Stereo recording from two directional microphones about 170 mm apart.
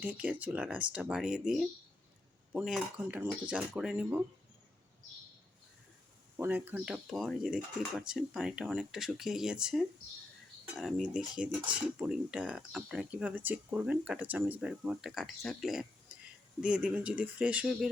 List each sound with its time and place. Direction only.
0.0 s speech: 10° right (ahead or behind)
6.4 s speech: 10° right (ahead or behind)